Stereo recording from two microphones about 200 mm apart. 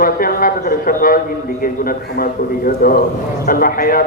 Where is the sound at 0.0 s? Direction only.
45° left (ahead or behind).